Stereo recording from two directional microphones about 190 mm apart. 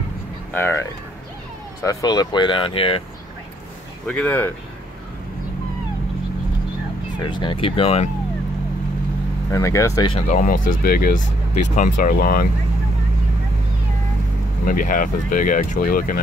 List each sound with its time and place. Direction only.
0.5 s speech: 10° left (ahead or behind); by 3.0 s 30° left (ahead or behind)
4.1 s speech: 10° left (ahead or behind)
7.2 s speech: 25° left (ahead or behind)
9.5 s speech: 15° left (ahead or behind)
10.1 s speech: 45° left (ahead or behind)
14.7 s speech: 45° left (ahead or behind)